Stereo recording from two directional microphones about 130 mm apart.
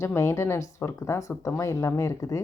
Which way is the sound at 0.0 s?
20° left (ahead or behind).